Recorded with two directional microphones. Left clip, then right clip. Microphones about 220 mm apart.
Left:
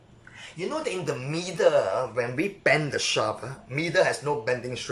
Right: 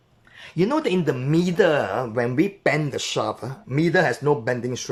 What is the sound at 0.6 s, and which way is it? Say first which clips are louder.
Speech: right 8 dB; 40° right (ahead or behind).